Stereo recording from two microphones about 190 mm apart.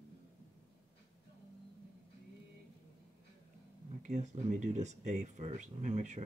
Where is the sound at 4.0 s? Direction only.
40° right (ahead or behind).